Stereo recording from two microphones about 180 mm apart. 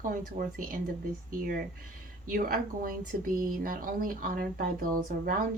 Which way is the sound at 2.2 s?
50° right (ahead or behind).